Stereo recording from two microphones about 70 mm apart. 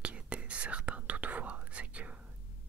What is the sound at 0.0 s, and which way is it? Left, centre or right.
Whispering, centre.